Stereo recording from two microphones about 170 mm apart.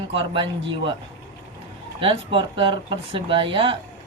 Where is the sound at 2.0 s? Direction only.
30° right (ahead or behind).